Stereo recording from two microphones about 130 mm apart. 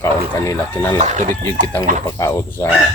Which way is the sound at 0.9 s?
70° right (ahead or behind).